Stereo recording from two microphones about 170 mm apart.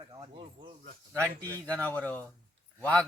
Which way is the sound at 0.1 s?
30° right (ahead or behind).